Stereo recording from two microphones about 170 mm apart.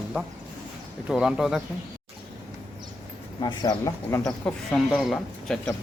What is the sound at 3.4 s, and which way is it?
Speech, 25° left (ahead or behind).